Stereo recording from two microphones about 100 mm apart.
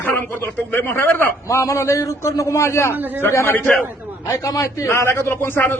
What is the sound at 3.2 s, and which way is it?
Speech, 25° left (ahead or behind).